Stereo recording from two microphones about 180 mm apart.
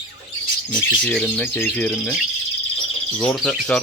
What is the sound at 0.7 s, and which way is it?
Speech, 5° left (ahead or behind).